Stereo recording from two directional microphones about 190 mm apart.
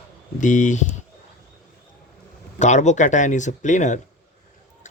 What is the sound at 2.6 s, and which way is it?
Speech, 40° left (ahead or behind).